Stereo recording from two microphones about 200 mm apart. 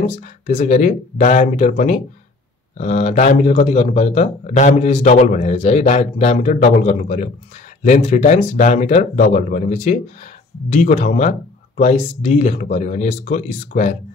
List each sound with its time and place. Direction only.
0.0 s a man's voice: 35° left (ahead or behind)